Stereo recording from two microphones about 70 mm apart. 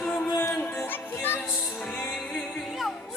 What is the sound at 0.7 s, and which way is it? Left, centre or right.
Music, left.